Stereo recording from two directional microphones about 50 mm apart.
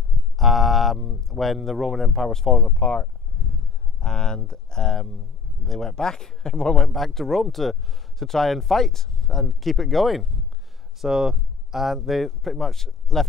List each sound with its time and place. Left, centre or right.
0.4 s speech: centre
2.6 s speech: left
4.0 s speech: centre
6.9 s speech: centre
11.0 s speech: centre